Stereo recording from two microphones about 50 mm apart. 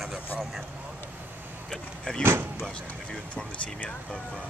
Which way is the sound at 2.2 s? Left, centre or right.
Right.